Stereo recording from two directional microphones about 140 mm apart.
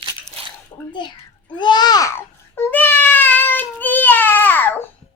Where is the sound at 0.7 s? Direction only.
30° left (ahead or behind).